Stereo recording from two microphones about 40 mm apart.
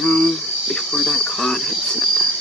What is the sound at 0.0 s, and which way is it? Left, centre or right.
Cricket, centre.